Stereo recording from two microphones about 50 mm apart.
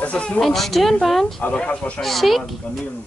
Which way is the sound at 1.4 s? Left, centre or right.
Left.